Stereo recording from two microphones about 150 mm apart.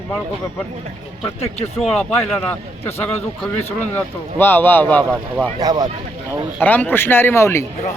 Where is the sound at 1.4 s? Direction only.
45° left (ahead or behind).